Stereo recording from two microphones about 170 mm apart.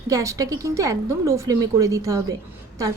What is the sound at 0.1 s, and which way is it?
A woman's voice, 20° right (ahead or behind).